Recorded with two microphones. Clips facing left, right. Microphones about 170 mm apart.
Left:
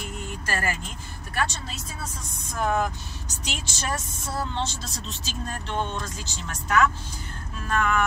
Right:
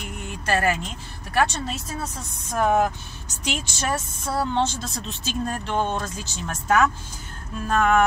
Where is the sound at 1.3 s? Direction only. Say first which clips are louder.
Right 7 dB; 70° right (ahead or behind).